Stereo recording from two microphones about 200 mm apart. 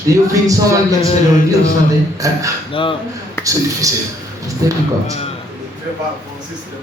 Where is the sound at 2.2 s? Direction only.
15° right (ahead or behind).